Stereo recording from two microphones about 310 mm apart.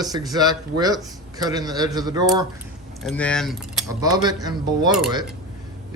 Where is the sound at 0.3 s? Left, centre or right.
Centre.